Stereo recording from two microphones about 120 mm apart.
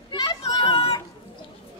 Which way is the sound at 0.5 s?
45° left (ahead or behind).